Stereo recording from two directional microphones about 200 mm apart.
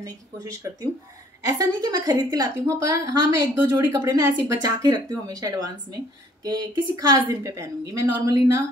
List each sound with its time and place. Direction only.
0.0 s a woman's voice: 15° right (ahead or behind)